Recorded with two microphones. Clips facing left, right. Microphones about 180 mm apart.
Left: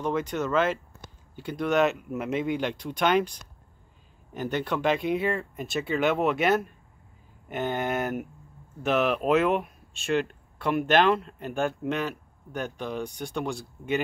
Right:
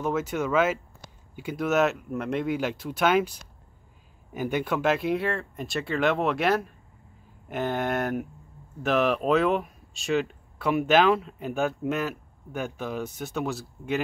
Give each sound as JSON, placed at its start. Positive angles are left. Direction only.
{"t": 0.0, "sound": "speech", "side_deg": -5}